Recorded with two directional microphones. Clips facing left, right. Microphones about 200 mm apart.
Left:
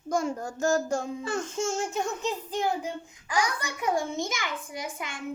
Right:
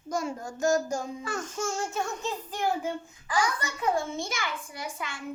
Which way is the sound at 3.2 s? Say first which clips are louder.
Even; 15° left (ahead or behind).